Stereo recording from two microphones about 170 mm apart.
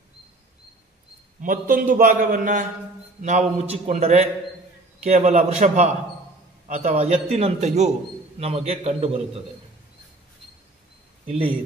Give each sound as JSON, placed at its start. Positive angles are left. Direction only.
{"t": 1.4, "sound": "a man's voice", "side_deg": -55}
{"t": 11.2, "sound": "a man's voice", "side_deg": -35}